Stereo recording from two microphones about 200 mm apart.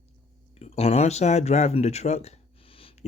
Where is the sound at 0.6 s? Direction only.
30° left (ahead or behind).